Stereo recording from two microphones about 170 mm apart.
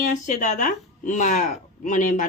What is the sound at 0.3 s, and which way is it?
Speech, 45° left (ahead or behind).